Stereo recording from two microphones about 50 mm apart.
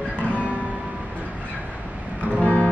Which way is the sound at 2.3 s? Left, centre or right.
Left.